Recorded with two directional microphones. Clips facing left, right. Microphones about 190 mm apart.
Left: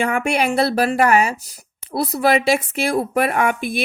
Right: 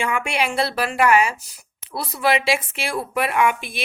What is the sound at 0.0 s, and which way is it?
Speech, 40° left (ahead or behind).